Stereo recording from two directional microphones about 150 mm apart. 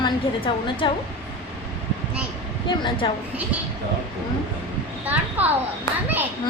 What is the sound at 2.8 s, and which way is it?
Speech, 30° left (ahead or behind).